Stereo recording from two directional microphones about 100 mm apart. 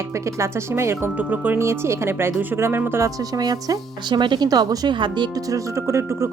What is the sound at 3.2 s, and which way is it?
Speech, 40° right (ahead or behind).